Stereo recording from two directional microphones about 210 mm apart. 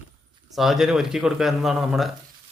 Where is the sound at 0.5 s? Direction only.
Centre (ahead or behind).